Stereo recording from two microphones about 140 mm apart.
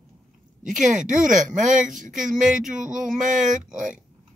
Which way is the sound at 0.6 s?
65° right (ahead or behind).